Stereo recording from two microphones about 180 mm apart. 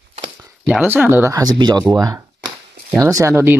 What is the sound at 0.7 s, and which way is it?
Speech, 10° right (ahead or behind).